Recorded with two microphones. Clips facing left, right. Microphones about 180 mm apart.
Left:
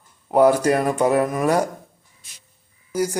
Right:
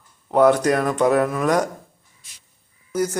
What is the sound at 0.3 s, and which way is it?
Speech, 10° left (ahead or behind).